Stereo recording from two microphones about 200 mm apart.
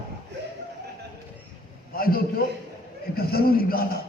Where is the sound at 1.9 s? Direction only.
45° left (ahead or behind).